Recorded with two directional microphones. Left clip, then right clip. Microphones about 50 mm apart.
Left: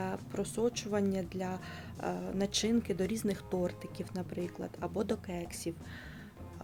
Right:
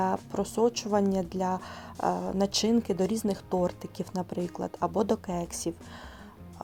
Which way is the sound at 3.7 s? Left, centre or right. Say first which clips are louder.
Right 6 dB; right.